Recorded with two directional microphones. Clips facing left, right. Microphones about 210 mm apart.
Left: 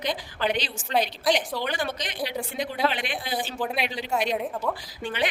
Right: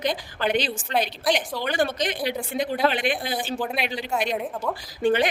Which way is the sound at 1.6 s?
50° right (ahead or behind).